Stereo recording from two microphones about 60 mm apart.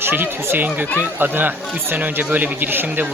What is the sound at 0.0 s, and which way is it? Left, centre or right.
A man's voice, right.